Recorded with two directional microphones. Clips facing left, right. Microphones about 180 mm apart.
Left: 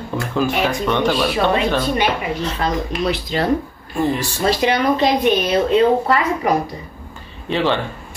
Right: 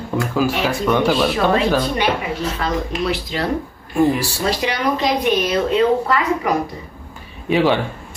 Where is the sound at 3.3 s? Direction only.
35° left (ahead or behind).